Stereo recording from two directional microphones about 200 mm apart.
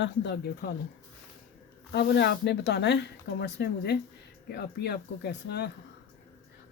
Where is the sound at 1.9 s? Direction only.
60° left (ahead or behind).